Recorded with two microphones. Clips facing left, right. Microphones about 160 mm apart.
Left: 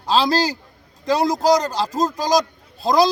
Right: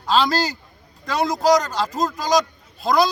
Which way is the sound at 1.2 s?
35° left (ahead or behind).